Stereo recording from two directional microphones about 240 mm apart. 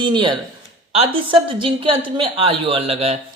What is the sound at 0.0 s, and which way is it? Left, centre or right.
A woman's voice, centre.